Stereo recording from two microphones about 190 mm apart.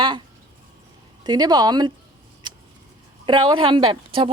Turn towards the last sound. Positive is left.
turn(degrees=-25)  # may be behind; listen again after turning